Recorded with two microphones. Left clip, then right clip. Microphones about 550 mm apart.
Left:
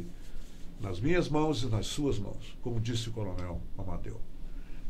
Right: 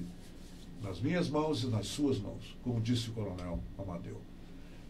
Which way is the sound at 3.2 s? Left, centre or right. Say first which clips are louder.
Left 2 dB; left.